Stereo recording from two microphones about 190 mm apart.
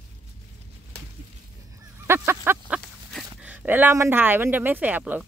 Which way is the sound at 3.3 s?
10° right (ahead or behind).